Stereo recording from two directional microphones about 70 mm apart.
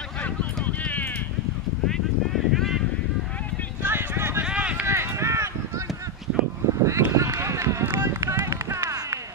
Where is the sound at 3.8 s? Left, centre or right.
Right.